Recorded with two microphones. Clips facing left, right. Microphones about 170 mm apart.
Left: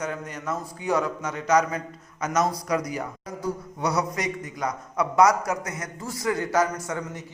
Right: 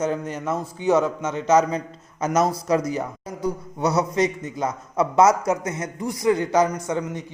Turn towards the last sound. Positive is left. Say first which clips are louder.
# right 5 dB
turn(degrees=-20)  # may be behind; listen again after turning